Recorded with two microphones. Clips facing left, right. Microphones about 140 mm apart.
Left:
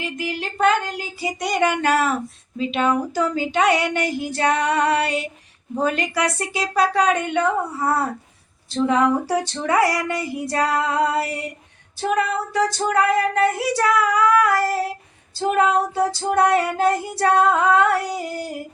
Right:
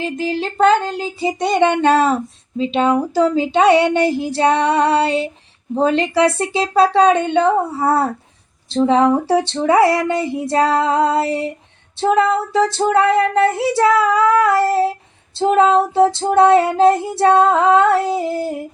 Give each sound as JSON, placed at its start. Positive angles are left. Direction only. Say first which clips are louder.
{"t": 0.0, "sound": "female singing", "louder": "right 7 dB", "side_deg": -30}